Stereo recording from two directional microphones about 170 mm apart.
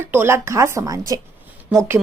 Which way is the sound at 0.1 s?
15° right (ahead or behind).